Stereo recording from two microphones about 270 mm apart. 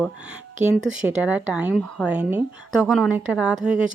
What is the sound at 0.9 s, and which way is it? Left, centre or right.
Speech, centre.